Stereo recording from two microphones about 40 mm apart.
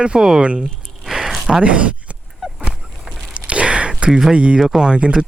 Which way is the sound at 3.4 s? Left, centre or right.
Right.